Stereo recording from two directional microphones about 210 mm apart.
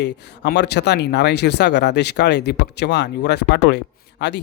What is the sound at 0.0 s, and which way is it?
Speech, 55° left (ahead or behind).